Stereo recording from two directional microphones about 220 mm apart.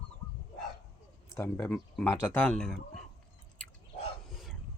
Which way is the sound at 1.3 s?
10° left (ahead or behind).